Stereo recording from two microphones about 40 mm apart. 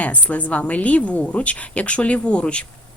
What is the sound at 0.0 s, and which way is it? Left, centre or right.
A woman's voice, left.